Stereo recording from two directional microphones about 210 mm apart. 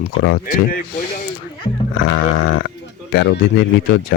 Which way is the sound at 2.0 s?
55° left (ahead or behind).